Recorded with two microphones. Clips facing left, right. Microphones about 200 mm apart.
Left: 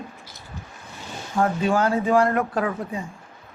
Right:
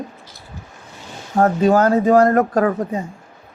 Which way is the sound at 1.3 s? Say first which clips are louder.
Right 7 dB; 40° right (ahead or behind).